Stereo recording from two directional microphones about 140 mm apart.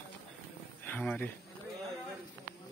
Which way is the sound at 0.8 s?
15° left (ahead or behind).